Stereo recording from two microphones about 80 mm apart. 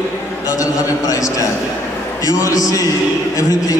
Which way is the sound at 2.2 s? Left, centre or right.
Left.